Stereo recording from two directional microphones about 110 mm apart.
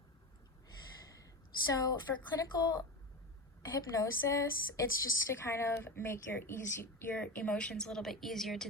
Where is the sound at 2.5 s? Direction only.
30° left (ahead or behind).